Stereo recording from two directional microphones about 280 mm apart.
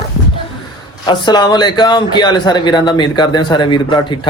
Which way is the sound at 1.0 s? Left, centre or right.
Centre.